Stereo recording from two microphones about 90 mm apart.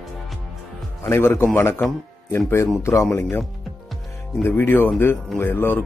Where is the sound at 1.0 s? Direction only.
25° left (ahead or behind).